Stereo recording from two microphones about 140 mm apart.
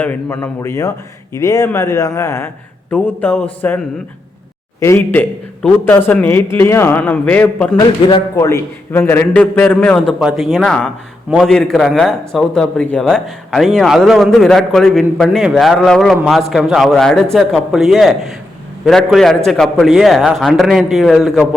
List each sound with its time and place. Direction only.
0.0 s a man's voice: 10° left (ahead or behind)
4.8 s a man's voice: 15° left (ahead or behind)
7.8 s a man's voice: 30° left (ahead or behind); by 10.2 s 10° left (ahead or behind)
10.2 s speech: centre (ahead or behind)